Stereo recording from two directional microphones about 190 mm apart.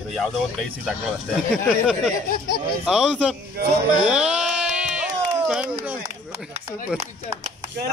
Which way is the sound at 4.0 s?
5° right (ahead or behind).